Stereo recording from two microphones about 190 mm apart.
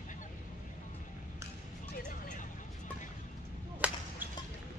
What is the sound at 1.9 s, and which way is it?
Vehicle, 40° left (ahead or behind).